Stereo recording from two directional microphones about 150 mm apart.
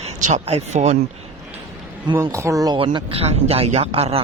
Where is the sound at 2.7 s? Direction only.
35° right (ahead or behind).